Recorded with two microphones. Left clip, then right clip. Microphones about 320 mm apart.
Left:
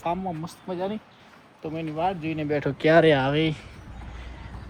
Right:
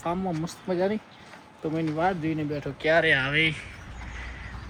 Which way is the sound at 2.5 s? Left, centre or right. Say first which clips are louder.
Left 5 dB; left.